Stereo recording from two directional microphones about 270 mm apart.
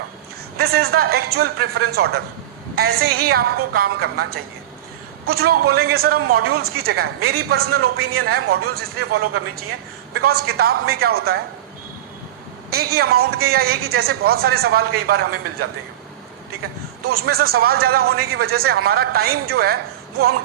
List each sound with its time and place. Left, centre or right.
0.5 s a man's voice: right
7.8 s a man's voice: right
8.1 s a man's voice: right
12.7 s a man's voice: right
17.0 s a man's voice: right